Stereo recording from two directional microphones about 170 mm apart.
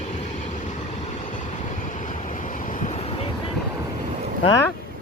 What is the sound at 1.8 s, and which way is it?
Vehicle, 50° left (ahead or behind).